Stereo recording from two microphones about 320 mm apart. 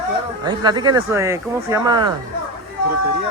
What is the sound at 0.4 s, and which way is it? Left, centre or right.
Speech, centre.